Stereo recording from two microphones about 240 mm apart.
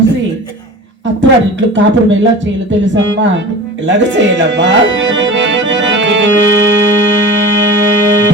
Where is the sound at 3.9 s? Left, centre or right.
Right.